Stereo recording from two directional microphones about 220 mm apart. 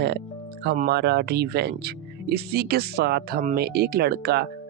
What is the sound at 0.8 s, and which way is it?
Speech, 50° right (ahead or behind).